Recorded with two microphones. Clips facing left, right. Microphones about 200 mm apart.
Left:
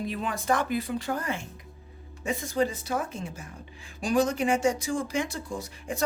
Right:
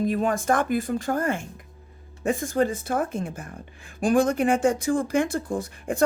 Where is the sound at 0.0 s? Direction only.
45° right (ahead or behind).